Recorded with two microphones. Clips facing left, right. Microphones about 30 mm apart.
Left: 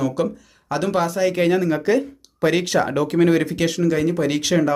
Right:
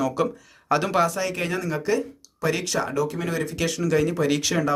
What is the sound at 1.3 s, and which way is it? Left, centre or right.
Speech, left.